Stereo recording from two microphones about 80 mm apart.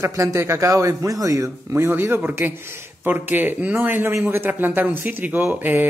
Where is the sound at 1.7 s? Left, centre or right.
Right.